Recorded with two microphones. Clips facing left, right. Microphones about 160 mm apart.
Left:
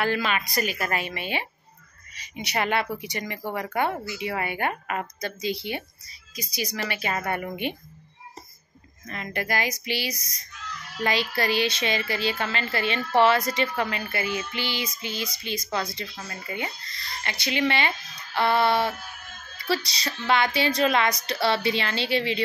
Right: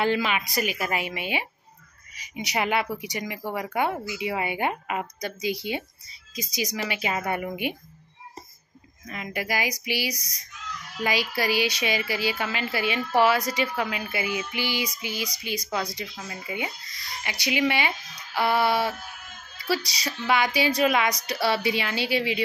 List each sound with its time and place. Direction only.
0.0 s a woman's voice: 15° right (ahead or behind)
9.0 s a woman's voice: 10° right (ahead or behind)